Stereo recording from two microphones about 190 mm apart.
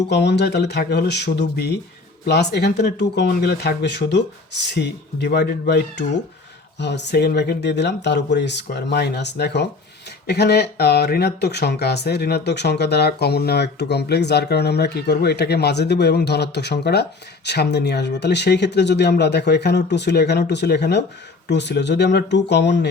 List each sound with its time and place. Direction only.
0.1 s speech: 65° left (ahead or behind)